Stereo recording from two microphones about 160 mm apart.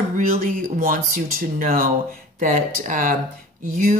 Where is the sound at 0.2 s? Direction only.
60° right (ahead or behind).